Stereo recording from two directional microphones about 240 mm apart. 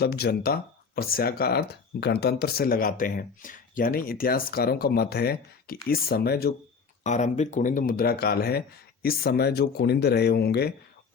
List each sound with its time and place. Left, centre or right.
0.0 s speech: left
7.0 s speech: left